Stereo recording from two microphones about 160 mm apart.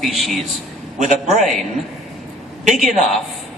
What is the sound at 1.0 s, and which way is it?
Speech, 50° right (ahead or behind).